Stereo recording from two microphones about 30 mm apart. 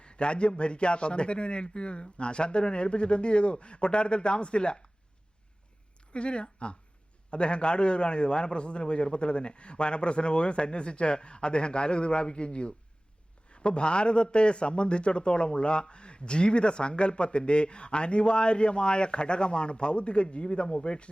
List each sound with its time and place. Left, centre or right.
0.0 s a man's voice: left
6.1 s a man's voice: left